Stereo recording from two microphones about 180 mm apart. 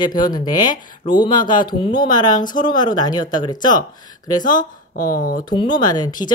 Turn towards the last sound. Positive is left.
turn(degrees=25)  # may be behind; listen again after turning